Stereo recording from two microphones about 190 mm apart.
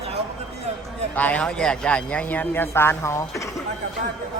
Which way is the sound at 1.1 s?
10° left (ahead or behind).